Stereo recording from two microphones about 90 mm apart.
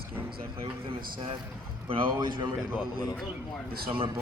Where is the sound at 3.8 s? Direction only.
90° right.